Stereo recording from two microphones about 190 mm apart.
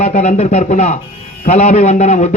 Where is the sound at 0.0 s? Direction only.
35° left (ahead or behind).